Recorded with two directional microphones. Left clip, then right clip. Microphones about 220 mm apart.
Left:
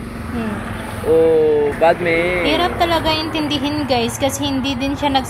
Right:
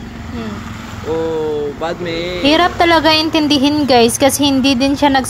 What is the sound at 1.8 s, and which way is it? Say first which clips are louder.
A woman's voice: left 6 dB; 20° right (ahead or behind).